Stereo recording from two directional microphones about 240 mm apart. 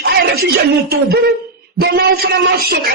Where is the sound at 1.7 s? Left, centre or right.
Right.